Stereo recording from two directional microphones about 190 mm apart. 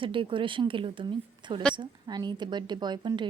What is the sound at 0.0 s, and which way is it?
A woman's voice, 25° right (ahead or behind).